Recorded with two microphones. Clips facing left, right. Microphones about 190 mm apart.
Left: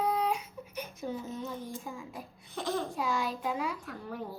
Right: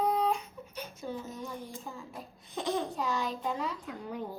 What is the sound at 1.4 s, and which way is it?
Speech, 15° right (ahead or behind).